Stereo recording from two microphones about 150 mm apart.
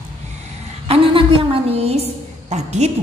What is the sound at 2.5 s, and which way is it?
Speech, 50° right (ahead or behind).